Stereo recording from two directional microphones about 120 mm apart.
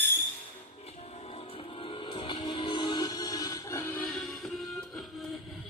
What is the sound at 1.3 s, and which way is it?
Music, 50° left (ahead or behind).